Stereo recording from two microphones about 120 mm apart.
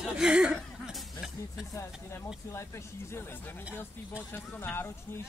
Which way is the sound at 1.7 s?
25° left (ahead or behind).